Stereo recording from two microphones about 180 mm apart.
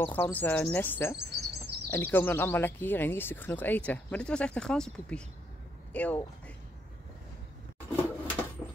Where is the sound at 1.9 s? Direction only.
10° left (ahead or behind).